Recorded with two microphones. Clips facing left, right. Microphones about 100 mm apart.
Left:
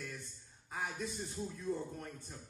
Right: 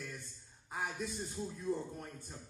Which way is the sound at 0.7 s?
5° right (ahead or behind).